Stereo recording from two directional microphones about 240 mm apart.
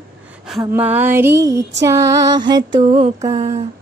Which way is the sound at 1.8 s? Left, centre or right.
Centre.